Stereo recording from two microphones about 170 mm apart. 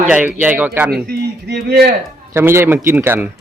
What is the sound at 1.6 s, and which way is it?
Speech, 75° right (ahead or behind).